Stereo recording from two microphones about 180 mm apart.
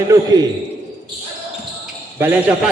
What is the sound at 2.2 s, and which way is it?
Speech, 10° right (ahead or behind).